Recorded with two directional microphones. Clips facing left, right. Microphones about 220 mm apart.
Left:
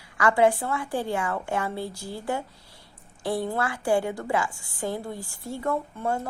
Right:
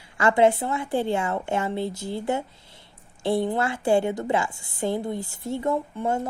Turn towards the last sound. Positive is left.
turn(degrees=-20)  # may be behind; listen again after turning